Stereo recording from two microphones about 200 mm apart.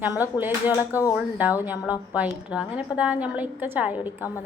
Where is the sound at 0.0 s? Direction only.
10° right (ahead or behind).